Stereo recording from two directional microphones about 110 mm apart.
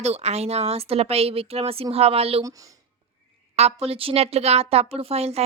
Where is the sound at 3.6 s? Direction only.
70° right (ahead or behind).